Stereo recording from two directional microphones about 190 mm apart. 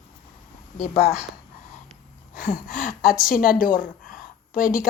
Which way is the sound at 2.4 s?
45° left (ahead or behind).